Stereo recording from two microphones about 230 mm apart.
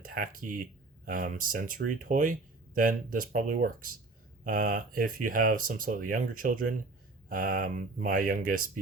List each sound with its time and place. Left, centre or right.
0.0 s speech: right